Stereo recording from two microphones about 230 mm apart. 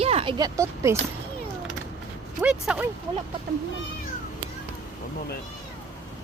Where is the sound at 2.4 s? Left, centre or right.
Centre.